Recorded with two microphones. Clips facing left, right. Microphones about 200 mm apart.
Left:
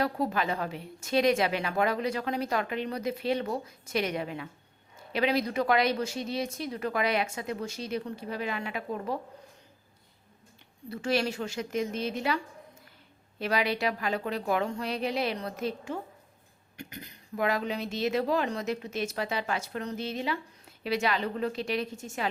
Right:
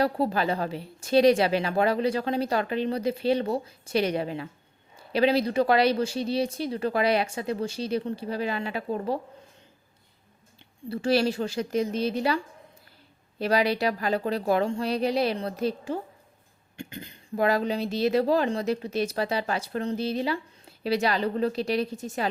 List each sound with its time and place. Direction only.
0.0 s a woman's voice: 35° right (ahead or behind)
10.8 s a woman's voice: 35° right (ahead or behind)
13.4 s a woman's voice: 35° right (ahead or behind)